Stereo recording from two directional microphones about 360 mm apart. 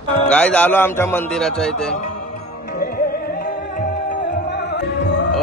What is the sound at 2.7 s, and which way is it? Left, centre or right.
Music, left.